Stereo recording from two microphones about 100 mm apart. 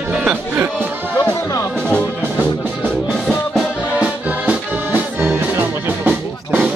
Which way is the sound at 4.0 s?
20° right (ahead or behind).